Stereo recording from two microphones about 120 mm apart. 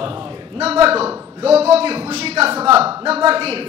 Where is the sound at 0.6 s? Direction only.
55° right (ahead or behind).